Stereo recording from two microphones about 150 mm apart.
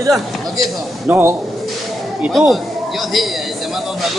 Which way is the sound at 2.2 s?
Centre (ahead or behind).